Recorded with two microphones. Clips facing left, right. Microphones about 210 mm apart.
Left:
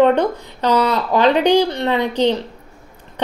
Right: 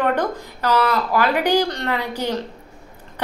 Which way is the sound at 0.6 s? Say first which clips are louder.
Left 3 dB; 20° left (ahead or behind).